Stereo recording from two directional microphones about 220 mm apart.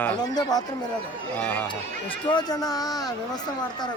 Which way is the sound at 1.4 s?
5° left (ahead or behind).